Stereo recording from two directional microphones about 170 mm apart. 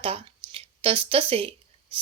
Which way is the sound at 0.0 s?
35° right (ahead or behind).